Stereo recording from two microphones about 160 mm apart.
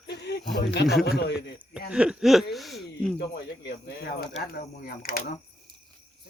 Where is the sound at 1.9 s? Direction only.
5° right (ahead or behind).